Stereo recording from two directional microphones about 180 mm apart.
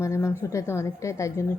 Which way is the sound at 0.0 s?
15° left (ahead or behind).